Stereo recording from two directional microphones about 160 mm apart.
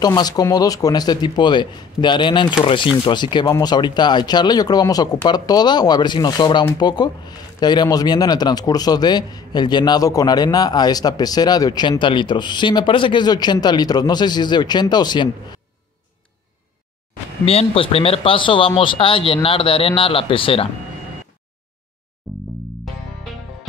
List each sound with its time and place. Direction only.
0.0 s speech: 25° left (ahead or behind)
17.5 s speech: 35° left (ahead or behind)
22.2 s music: centre (ahead or behind)